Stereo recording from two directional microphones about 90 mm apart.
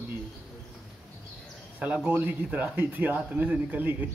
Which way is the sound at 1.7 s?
15° right (ahead or behind).